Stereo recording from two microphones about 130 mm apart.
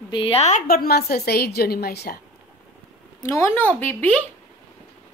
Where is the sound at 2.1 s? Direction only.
90° left.